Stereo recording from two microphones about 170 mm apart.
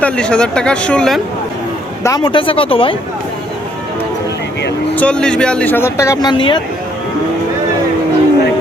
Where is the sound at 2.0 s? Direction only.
25° left (ahead or behind).